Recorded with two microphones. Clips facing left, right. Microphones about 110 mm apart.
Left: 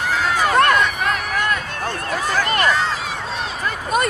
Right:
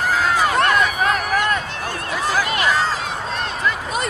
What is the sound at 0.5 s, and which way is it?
Run, 40° left (ahead or behind).